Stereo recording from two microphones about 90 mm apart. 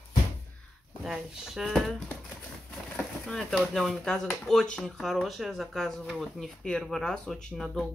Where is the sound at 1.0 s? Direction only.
5° right (ahead or behind).